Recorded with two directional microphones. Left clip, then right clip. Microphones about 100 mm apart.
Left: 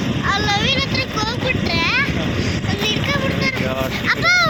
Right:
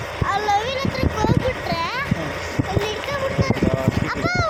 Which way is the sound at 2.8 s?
55° right (ahead or behind).